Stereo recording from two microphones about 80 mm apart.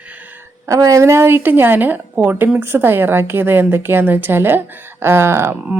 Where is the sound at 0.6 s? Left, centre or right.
Right.